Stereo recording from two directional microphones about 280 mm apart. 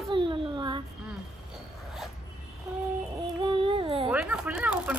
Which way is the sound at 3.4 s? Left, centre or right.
Centre.